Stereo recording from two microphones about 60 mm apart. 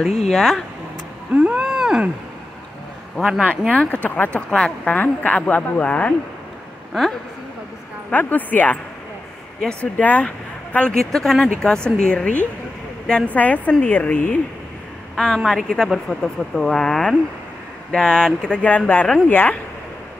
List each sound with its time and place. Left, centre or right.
0.0 s speech: centre
1.3 s a sound: right
1.6 s a sound: centre
3.2 s speech: centre
3.7 s speech: left
6.9 s a woman's voice: centre
8.1 s speech: left
9.6 s speech: centre
9.9 s speech: left
11.1 s speech: centre; by 14.4 s left
15.1 s speech: centre
18.6 s speech: left